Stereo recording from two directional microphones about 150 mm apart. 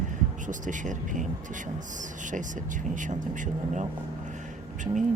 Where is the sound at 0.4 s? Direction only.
55° right (ahead or behind).